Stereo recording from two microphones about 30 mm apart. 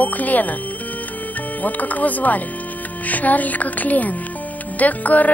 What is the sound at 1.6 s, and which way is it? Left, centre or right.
Speech, left.